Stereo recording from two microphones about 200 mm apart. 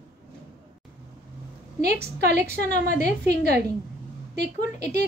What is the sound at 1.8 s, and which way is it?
A woman's voice, 50° right (ahead or behind).